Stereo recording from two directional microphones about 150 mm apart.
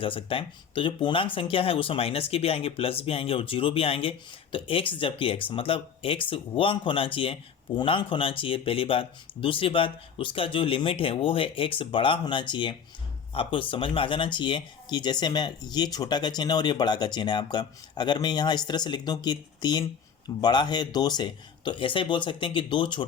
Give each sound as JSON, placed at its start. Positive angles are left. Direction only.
{"t": 0.0, "sound": "speech", "side_deg": 35}